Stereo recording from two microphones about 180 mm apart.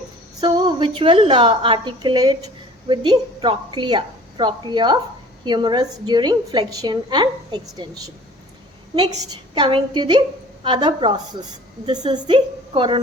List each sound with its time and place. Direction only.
0.3 s a woman's voice: 25° right (ahead or behind)